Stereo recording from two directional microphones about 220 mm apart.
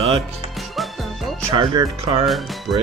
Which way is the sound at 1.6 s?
20° right (ahead or behind).